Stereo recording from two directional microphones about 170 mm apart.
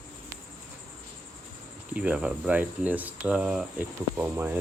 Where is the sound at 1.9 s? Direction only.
10° right (ahead or behind).